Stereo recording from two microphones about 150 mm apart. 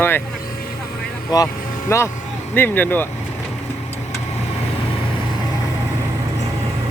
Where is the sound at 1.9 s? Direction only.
15° left (ahead or behind).